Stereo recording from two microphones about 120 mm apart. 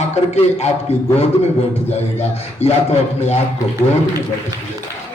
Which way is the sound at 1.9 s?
65° left (ahead or behind).